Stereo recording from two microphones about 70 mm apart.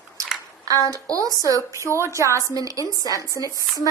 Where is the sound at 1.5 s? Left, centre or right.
Right.